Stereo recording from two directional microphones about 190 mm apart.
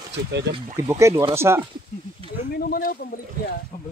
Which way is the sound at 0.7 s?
15° right (ahead or behind).